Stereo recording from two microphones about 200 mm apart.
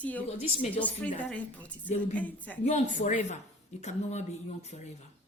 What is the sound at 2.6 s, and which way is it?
A woman's voice, 35° left (ahead or behind).